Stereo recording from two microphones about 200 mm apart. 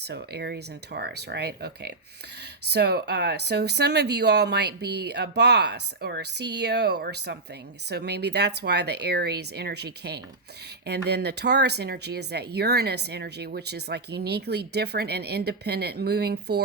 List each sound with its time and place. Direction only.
0.0 s speech: 55° right (ahead or behind)